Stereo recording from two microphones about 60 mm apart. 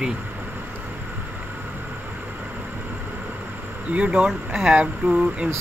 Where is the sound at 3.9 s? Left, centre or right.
Right.